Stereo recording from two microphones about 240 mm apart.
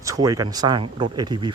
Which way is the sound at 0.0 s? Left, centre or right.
Centre.